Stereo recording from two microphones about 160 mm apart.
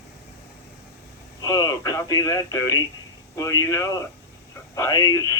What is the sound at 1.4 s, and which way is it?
Radio, 20° left (ahead or behind).